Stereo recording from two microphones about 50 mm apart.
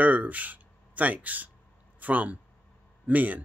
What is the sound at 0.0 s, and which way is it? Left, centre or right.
Speech, right.